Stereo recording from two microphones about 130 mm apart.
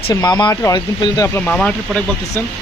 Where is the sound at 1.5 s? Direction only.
5° left (ahead or behind).